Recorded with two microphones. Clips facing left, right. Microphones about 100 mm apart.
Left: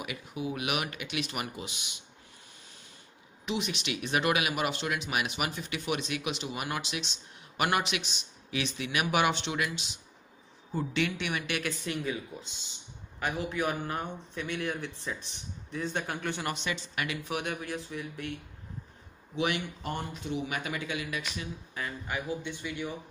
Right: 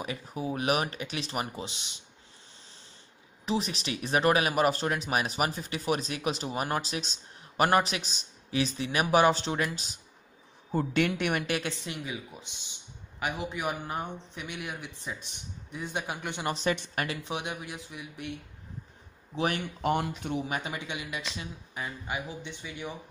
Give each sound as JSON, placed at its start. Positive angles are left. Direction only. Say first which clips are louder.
{"t": 0.0, "sound": "speech", "louder": "right 2 dB", "side_deg": -35}
{"t": 3.4, "sound": "a woman's voice", "louder": "right 2 dB", "side_deg": -35}
{"t": 11.5, "sound": "speech", "louder": "even", "side_deg": -25}
{"t": 16.9, "sound": "speech", "louder": "right 2 dB", "side_deg": -40}
{"t": 17.2, "sound": "speech", "louder": "left 1 dB", "side_deg": -20}
{"t": 19.3, "sound": "speech", "louder": "right 1 dB", "side_deg": -40}
{"t": 19.8, "sound": "speech", "louder": "right 7 dB", "side_deg": -75}
{"t": 20.4, "sound": "speech", "louder": "even", "side_deg": -30}